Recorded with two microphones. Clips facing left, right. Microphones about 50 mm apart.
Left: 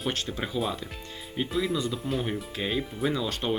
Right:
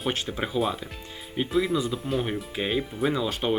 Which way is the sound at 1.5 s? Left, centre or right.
Centre.